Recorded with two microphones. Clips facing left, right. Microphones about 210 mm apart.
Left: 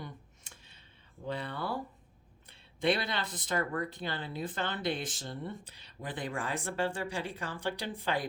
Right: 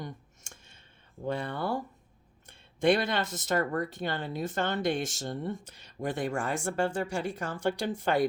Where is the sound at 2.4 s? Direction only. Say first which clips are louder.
Right 5 dB; 45° right (ahead or behind).